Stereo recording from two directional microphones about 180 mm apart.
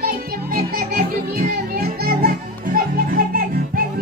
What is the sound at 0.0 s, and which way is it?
Music, 55° right (ahead or behind).